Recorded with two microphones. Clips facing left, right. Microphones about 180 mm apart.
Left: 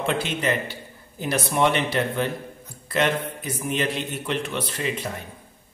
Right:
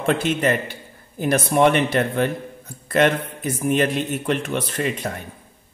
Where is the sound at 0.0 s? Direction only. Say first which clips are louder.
Right 5 dB; 50° right (ahead or behind).